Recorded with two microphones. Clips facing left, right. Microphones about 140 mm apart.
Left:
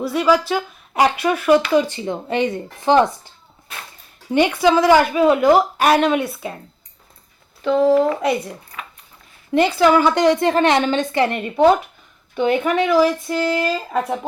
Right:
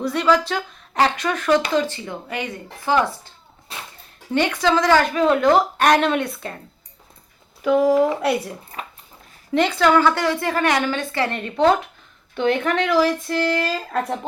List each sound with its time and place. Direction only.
0.0 s a woman's voice: 5° left (ahead or behind); by 3.1 s 25° left (ahead or behind)
4.3 s a woman's voice: 15° left (ahead or behind)
7.6 s speech: 10° right (ahead or behind)
8.7 s dog: 40° right (ahead or behind)
9.5 s a woman's voice: 5° left (ahead or behind)